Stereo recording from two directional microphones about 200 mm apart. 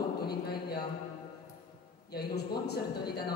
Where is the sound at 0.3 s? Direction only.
55° left (ahead or behind).